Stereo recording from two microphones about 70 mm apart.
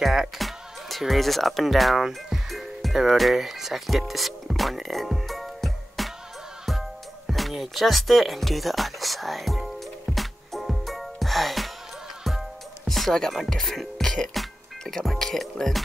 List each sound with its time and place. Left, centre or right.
0.0 s speech: centre
7.2 s music: centre